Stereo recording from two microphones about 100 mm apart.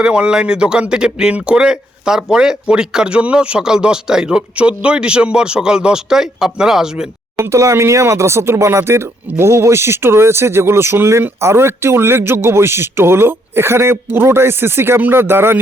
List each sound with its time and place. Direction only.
0.0 s speech: 10° right (ahead or behind)
7.3 s speech: 30° right (ahead or behind)